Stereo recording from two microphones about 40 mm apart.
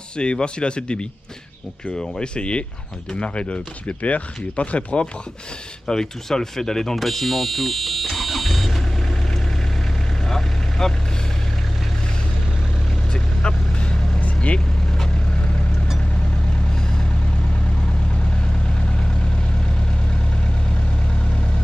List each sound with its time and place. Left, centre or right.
0.2 s speech: left
5.9 s speech: centre
7.0 s fire alarm: centre
10.2 s vehicle: centre
13.1 s vehicle: left
14.2 s vehicle: left
18.8 s vehicle: left